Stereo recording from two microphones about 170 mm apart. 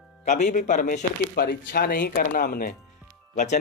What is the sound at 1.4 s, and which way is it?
Speech, 65° left (ahead or behind).